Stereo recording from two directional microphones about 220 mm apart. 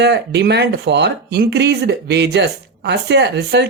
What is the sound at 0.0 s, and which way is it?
Speech, 50° right (ahead or behind).